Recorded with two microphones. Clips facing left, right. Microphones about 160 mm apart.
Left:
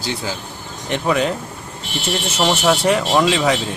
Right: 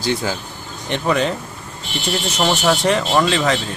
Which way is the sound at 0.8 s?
5° left (ahead or behind).